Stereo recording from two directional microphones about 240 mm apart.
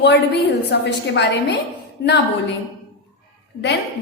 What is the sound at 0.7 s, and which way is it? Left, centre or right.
A woman's voice, left.